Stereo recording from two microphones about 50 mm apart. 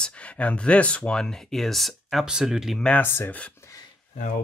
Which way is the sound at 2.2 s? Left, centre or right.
Centre.